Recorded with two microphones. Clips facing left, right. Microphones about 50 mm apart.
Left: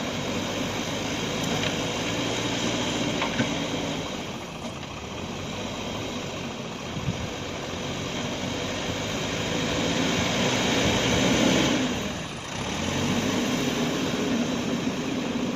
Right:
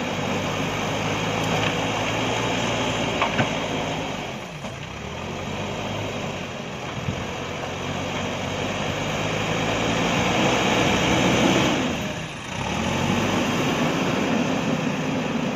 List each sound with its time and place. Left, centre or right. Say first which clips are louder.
0.3 s vehicle: right 4 dB; right
8.6 s vehicle: right 4 dB; right